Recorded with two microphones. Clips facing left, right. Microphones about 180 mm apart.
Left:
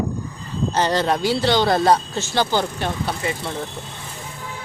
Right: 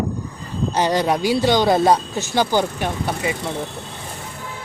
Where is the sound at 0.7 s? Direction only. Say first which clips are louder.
Right 1 dB; 15° right (ahead or behind).